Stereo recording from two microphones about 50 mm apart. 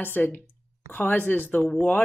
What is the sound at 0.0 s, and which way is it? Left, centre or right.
Speech, left.